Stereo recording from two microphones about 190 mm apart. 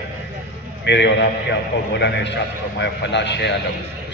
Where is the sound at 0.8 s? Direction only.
65° left (ahead or behind).